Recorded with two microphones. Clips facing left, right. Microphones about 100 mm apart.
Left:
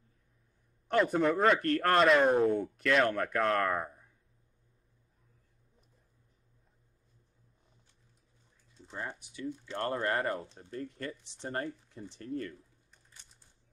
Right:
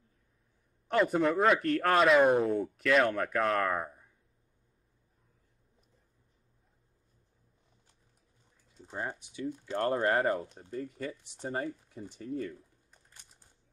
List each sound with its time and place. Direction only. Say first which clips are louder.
0.8 s speech: even; centre (ahead or behind)
8.9 s speech: right 3 dB; 20° right (ahead or behind)
10.4 s speech: right 2 dB; 10° right (ahead or behind)